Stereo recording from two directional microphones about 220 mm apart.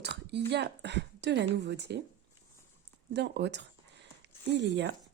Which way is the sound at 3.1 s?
50° right (ahead or behind).